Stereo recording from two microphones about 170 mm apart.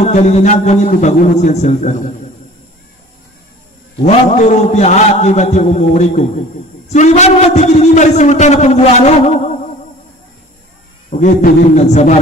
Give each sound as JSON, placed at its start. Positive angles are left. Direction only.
{"t": 0.0, "sound": "a man's voice", "side_deg": 40}
{"t": 4.0, "sound": "a man's voice", "side_deg": 45}
{"t": 11.1, "sound": "a man's voice", "side_deg": 50}